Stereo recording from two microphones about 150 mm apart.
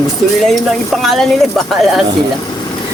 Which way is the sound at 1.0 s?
Centre (ahead or behind).